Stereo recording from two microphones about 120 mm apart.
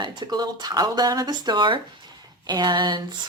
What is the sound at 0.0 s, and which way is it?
Speech, 40° right (ahead or behind).